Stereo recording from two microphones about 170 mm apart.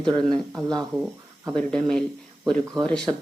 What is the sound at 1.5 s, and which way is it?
Speech, 5° left (ahead or behind).